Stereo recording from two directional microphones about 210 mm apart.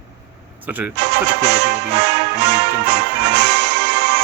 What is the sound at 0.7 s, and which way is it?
Speech, 10° right (ahead or behind).